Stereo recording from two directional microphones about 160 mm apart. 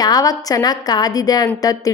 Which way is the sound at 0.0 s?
25° left (ahead or behind).